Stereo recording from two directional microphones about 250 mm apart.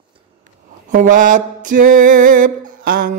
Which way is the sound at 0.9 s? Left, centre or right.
Right.